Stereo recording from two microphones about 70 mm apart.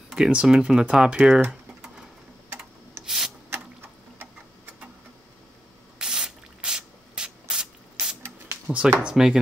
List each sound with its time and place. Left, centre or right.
0.1 s speech: centre
3.0 s rub: right
5.9 s spray: centre
8.7 s speech: centre